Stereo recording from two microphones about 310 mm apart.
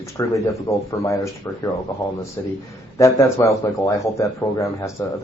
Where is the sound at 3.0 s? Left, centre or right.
Centre.